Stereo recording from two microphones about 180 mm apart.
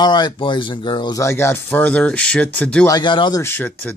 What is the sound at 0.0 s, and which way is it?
Speech, 25° left (ahead or behind).